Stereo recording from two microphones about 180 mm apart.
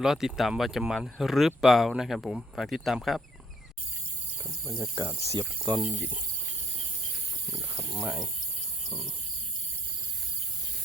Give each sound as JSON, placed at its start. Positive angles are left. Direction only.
{"t": 0.0, "sound": "speech", "side_deg": -5}
{"t": 4.6, "sound": "cricket", "side_deg": -20}
{"t": 5.6, "sound": "speech", "side_deg": -5}
{"t": 8.0, "sound": "speech", "side_deg": -10}